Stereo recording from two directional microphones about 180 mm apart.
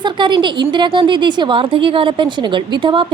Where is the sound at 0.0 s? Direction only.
25° right (ahead or behind).